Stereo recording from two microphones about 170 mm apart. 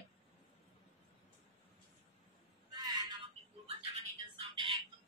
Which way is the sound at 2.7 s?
25° right (ahead or behind).